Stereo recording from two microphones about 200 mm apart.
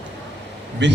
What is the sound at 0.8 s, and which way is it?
Speech, 60° right (ahead or behind).